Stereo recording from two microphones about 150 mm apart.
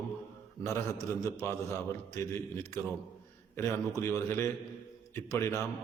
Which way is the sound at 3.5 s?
20° left (ahead or behind).